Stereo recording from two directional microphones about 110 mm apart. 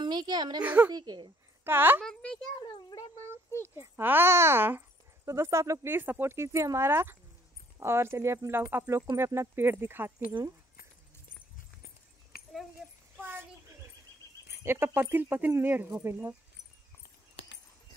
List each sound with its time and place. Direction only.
0.0 s a child's voice: 40° right (ahead or behind)
0.6 s speech: 15° right (ahead or behind)
0.9 s speech: 40° right (ahead or behind)
1.6 s a woman's voice: 20° right (ahead or behind)
2.0 s a child's voice: 5° left (ahead or behind)
2.6 s a child's voice: 45° left (ahead or behind)
3.6 s a child's voice: 25° right (ahead or behind)
13.2 s a sound: 20° right (ahead or behind)
14.6 s a child's voice: 20° right (ahead or behind)